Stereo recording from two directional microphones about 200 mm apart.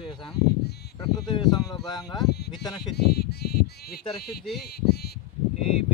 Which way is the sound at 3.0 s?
55° left (ahead or behind).